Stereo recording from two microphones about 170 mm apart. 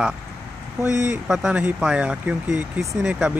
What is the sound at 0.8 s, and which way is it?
Speech, 15° right (ahead or behind).